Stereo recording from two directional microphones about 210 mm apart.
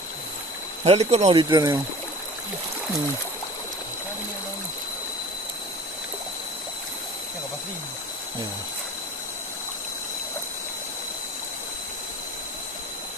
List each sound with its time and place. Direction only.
0.9 s speech: 30° right (ahead or behind)